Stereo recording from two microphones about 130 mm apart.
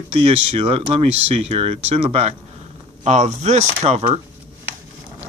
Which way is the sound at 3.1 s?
65° right (ahead or behind).